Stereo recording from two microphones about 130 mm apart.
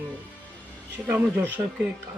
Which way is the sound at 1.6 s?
25° right (ahead or behind).